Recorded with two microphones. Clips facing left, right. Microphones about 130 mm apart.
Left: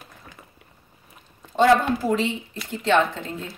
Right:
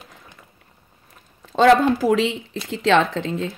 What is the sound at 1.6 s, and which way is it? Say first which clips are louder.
Speech: right 3 dB; 90° right.